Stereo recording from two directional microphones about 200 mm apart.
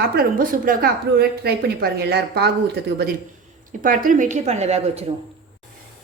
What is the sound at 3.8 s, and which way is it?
Speech, 40° right (ahead or behind).